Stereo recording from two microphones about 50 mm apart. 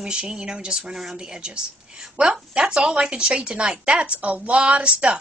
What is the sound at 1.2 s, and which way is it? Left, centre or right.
Speech, centre.